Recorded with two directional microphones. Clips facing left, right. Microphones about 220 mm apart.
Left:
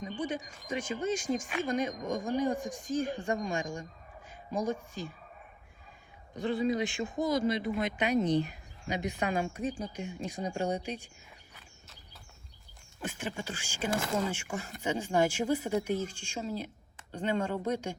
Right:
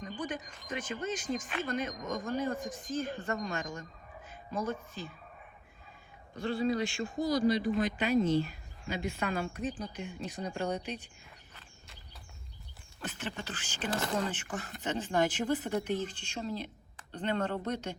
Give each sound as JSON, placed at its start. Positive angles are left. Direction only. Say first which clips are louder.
{"t": 0.0, "sound": "speech", "louder": "left 3 dB", "side_deg": 10}
{"t": 6.3, "sound": "speech", "louder": "left 1 dB", "side_deg": 20}
{"t": 13.0, "sound": "speech", "louder": "left 2 dB", "side_deg": 10}